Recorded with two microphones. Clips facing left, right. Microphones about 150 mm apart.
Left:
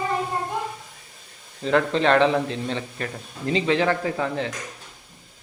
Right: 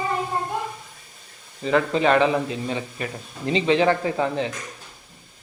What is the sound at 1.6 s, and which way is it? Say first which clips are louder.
A man's voice: even; 5° right (ahead or behind).